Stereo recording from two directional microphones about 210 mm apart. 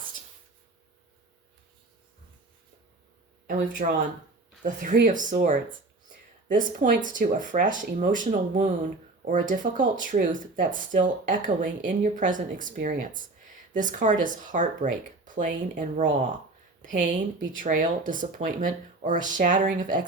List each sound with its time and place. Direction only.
3.4 s speech: 40° right (ahead or behind)
17.3 s speech: 40° right (ahead or behind)